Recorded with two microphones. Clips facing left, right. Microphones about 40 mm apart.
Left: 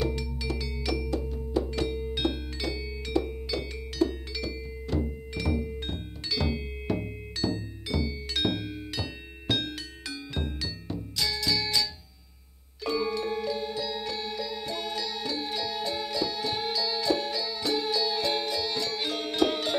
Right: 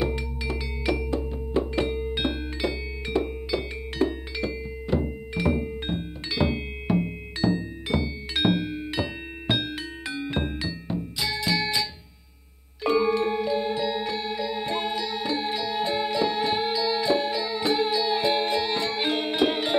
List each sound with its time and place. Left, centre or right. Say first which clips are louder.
0.0 s music: right 3 dB; right
15.0 s music: right 5 dB; right
18.5 s music: right 5 dB; right